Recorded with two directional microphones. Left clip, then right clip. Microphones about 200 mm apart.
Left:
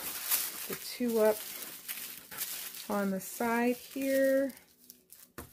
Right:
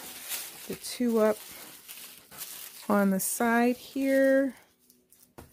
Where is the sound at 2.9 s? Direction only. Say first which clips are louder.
Right 8 dB; 50° right (ahead or behind).